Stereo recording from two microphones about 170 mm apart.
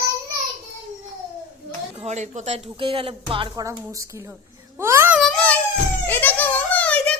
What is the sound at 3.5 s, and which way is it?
Speech, 20° right (ahead or behind).